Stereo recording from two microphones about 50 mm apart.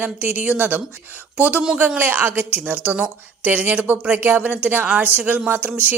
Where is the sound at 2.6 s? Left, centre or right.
Right.